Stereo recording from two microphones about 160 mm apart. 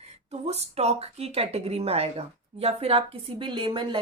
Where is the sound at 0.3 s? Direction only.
40° right (ahead or behind).